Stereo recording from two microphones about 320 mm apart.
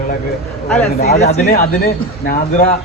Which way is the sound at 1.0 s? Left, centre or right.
Left.